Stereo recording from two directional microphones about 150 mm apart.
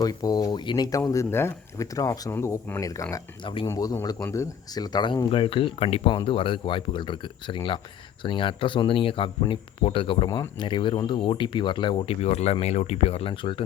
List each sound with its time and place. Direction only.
0.0 s speech: 25° left (ahead or behind)
3.4 s speech: 35° left (ahead or behind)
3.7 s speech: 20° left (ahead or behind); by 10.2 s 35° left (ahead or behind)
10.2 s speech: 25° left (ahead or behind)